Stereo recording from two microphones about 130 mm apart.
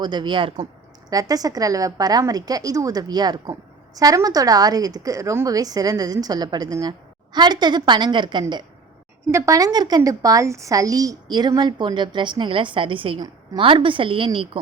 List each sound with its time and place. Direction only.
0.0 s a woman's voice: 35° right (ahead or behind)
1.1 s a woman's voice: 30° right (ahead or behind)